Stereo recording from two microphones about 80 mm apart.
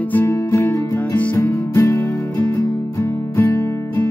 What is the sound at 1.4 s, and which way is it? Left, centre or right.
Music, left.